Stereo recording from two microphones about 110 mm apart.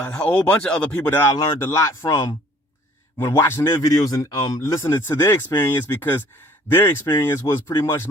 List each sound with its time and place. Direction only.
0.0 s speech: 15° left (ahead or behind)
3.8 s speech: 35° left (ahead or behind)